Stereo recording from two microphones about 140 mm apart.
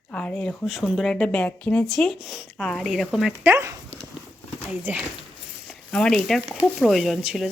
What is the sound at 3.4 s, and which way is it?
Speech, 20° right (ahead or behind).